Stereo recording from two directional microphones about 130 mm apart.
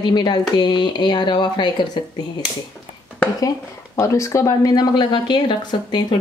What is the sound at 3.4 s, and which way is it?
Speech, 25° left (ahead or behind).